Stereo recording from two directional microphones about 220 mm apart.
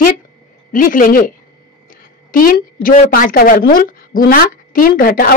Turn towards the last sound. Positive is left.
turn(degrees=40)  # may be behind; listen again after turning